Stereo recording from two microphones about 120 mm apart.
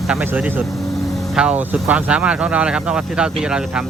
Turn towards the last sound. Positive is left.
turn(degrees=-5)  # may be behind; listen again after turning